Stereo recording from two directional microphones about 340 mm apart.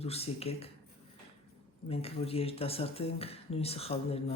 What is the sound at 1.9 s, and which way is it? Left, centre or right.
Speech, centre.